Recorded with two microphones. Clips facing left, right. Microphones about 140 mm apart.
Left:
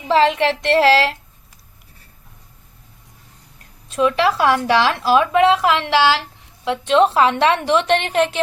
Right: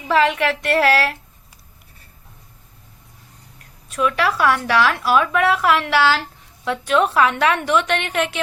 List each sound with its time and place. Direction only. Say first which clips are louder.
0.1 s a woman's voice: left 2 dB; 30° left (ahead or behind)
3.8 s a woman's voice: left 3 dB; 25° left (ahead or behind)